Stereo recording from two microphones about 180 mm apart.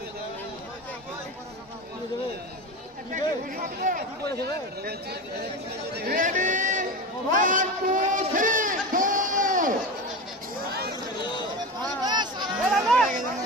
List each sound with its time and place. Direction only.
3.1 s a man's voice: 50° right (ahead or behind)
8.3 s crowd: 50° right (ahead or behind)
10.7 s chatter: 60° right (ahead or behind)
11.8 s chatter: 25° right (ahead or behind)
12.7 s a sound: 5° left (ahead or behind)